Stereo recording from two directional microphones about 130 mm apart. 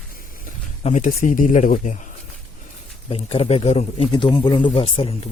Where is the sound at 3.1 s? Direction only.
50° left (ahead or behind).